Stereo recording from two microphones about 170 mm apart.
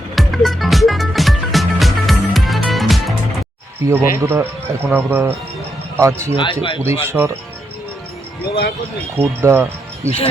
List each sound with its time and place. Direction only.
0.2 s music: centre (ahead or behind)
3.8 s a man's voice: 20° right (ahead or behind)
6.3 s a man's voice: 30° left (ahead or behind)
6.8 s a man's voice: 15° right (ahead or behind)
9.1 s speech: 15° right (ahead or behind)